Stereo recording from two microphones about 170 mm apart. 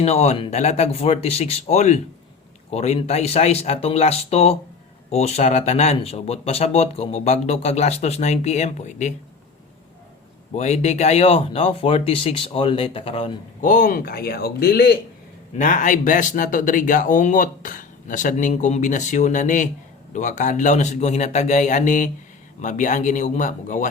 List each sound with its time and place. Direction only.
0.0 s speech: 40° left (ahead or behind)
10.5 s speech: 40° left (ahead or behind)
13.7 s speech: 50° left (ahead or behind); by 14.9 s 70° left (ahead or behind)
15.5 s speech: 50° left (ahead or behind)